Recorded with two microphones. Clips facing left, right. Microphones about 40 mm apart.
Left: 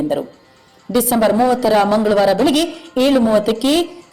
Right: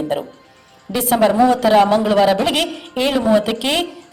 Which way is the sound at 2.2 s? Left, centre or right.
Right.